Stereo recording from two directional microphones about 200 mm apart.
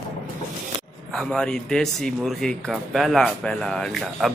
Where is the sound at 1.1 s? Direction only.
5° left (ahead or behind).